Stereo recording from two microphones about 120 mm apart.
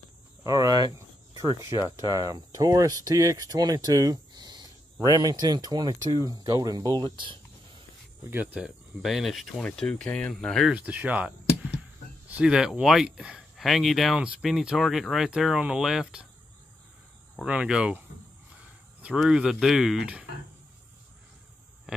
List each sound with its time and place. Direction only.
0.4 s speech: 30° right (ahead or behind)
8.3 s speech: 15° right (ahead or behind); by 10.7 s 5° left (ahead or behind)
10.7 s speech: 10° right (ahead or behind)
17.5 s speech: 10° right (ahead or behind)
19.1 s speech: 5° right (ahead or behind)
21.9 s a sound: 5° right (ahead or behind)